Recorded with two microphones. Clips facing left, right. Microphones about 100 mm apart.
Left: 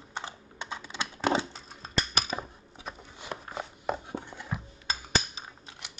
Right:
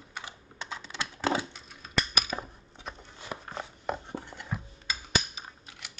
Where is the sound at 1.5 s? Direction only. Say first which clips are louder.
Even; 30° left (ahead or behind).